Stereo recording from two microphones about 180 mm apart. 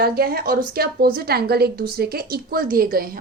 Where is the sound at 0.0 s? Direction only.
55° right (ahead or behind).